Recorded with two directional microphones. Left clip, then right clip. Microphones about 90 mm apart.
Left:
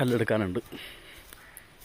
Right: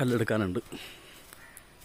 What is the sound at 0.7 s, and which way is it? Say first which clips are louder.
Speech: left 1 dB; 35° right (ahead or behind).